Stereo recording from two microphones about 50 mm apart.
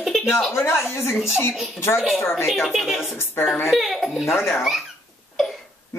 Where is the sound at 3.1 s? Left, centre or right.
Left.